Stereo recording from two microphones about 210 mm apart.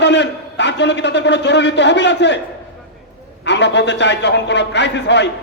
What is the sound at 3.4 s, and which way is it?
A man's voice, 55° left (ahead or behind).